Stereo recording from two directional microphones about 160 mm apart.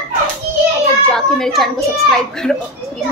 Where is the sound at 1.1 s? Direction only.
Centre (ahead or behind).